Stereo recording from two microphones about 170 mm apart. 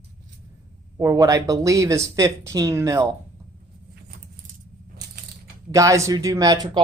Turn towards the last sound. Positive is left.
turn(degrees=-25)  # may be behind; listen again after turning